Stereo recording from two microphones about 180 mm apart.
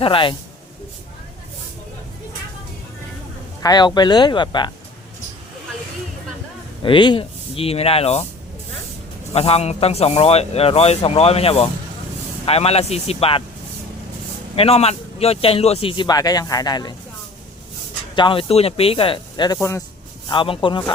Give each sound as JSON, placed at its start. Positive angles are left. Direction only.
{"t": 0.0, "sound": "speech", "side_deg": 30}
{"t": 3.6, "sound": "speech", "side_deg": 20}
{"t": 6.8, "sound": "a man's voice", "side_deg": 25}
{"t": 9.3, "sound": "a man's voice", "side_deg": 35}
{"t": 14.5, "sound": "a man's voice", "side_deg": 35}
{"t": 18.1, "sound": "speech", "side_deg": 25}
{"t": 19.5, "sound": "speech", "side_deg": 15}
{"t": 20.2, "sound": "speech", "side_deg": 30}